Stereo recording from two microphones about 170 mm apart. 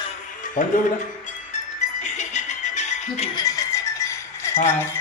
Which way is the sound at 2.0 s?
45° left (ahead or behind).